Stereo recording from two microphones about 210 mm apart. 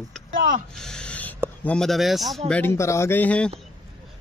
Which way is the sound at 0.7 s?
5° left (ahead or behind).